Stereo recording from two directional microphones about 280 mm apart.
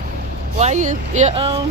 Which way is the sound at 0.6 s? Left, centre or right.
Right.